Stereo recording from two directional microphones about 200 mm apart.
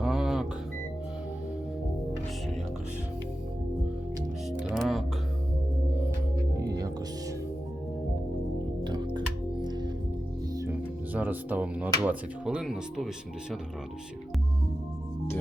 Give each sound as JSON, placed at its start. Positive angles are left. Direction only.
{"t": 0.0, "sound": "music", "side_deg": 0}
{"t": 4.7, "sound": "music", "side_deg": 0}
{"t": 6.6, "sound": "music", "side_deg": -20}
{"t": 8.8, "sound": "music", "side_deg": -20}
{"t": 10.6, "sound": "speech", "side_deg": -10}